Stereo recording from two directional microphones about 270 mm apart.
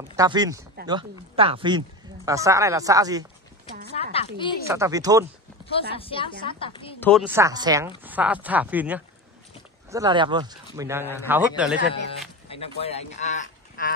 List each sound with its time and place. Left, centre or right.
0.1 s speech: centre
4.1 s speech: centre
4.6 s speech: centre
5.8 s a woman's voice: left
7.0 s speech: centre
7.2 s speech: centre
12.4 s speech: left